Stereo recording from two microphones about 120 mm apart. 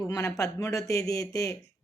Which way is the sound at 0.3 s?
25° left (ahead or behind).